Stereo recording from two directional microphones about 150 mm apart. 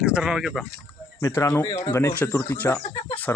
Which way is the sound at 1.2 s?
20° left (ahead or behind).